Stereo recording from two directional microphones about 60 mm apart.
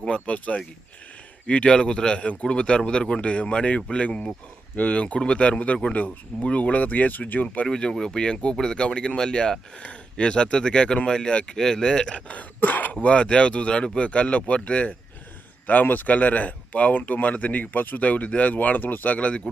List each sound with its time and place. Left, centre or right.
0.0 s speech: centre
12.3 s speech: left